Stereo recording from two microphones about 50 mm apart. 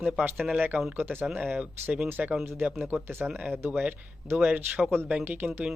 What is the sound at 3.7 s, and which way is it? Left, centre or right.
Speech, right.